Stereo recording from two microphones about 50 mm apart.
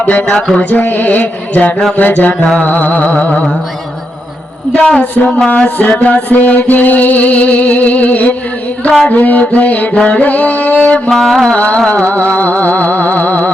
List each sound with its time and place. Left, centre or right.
0.0 s music: left
4.7 s music: centre
5.5 s music: left
11.1 s music: centre
11.5 s music: left